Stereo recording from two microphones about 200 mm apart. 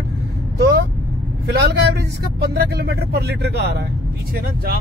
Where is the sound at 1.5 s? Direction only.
55° right (ahead or behind).